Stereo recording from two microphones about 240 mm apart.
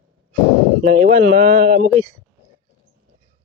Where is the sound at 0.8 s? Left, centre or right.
Right.